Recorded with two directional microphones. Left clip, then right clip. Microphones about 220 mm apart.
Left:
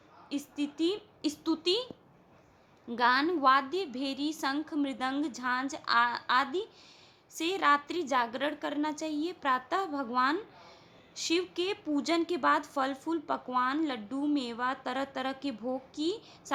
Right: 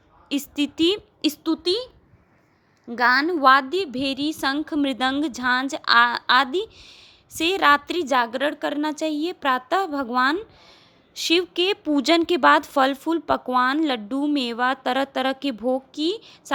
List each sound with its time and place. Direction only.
0.3 s speech: 40° right (ahead or behind)
2.9 s speech: 25° right (ahead or behind)